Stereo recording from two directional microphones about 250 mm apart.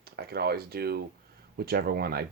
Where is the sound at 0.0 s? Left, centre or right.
Right.